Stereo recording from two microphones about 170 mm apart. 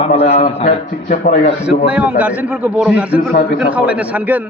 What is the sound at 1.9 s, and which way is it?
A man's voice, 5° right (ahead or behind).